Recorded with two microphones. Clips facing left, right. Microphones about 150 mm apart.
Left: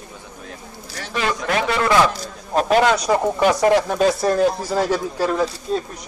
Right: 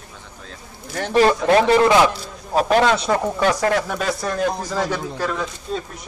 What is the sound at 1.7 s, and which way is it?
Speech, 20° right (ahead or behind).